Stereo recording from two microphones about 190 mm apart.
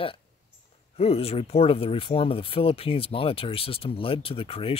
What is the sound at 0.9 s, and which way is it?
Speech, 30° left (ahead or behind).